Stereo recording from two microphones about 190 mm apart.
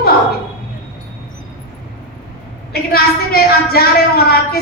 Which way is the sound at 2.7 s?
55° left (ahead or behind).